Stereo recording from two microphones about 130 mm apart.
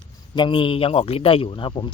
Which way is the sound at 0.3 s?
40° left (ahead or behind).